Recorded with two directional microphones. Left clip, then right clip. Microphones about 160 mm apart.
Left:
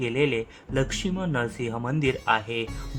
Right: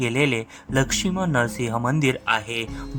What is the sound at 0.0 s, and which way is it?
Speech, 30° right (ahead or behind).